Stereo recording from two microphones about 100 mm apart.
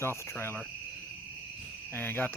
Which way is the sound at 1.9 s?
20° left (ahead or behind).